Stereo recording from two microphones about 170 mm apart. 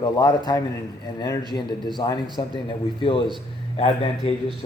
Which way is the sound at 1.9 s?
25° left (ahead or behind).